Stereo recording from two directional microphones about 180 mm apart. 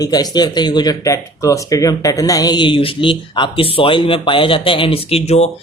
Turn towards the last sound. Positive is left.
turn(degrees=35)  # may be behind; listen again after turning